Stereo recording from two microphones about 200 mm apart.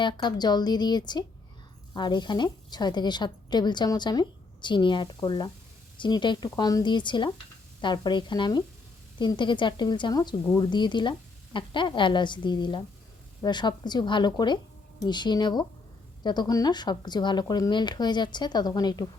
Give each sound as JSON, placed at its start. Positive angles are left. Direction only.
{"t": 0.0, "sound": "a woman's voice", "side_deg": 20}